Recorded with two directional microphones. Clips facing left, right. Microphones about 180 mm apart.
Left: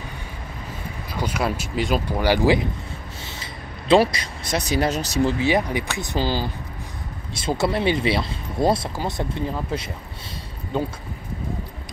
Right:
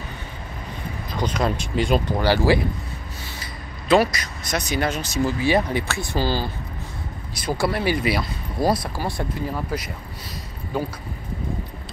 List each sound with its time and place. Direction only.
1.1 s speech: 10° left (ahead or behind)
3.9 s speech: 30° left (ahead or behind)
5.4 s speech: 15° left (ahead or behind)